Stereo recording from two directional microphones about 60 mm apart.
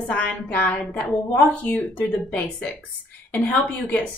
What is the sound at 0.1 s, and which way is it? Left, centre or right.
A woman's voice, left.